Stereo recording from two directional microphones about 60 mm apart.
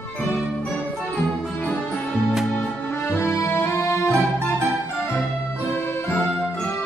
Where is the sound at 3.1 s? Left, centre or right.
Left.